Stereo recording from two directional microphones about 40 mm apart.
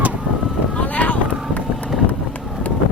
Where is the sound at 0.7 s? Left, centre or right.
Left.